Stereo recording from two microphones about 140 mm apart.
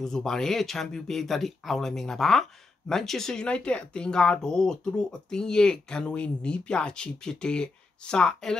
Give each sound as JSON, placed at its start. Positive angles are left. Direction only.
{"t": 0.0, "sound": "speech", "side_deg": 5}